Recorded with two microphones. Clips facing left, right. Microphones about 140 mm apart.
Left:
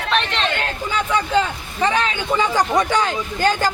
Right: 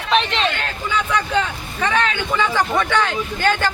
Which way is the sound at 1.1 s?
25° left (ahead or behind).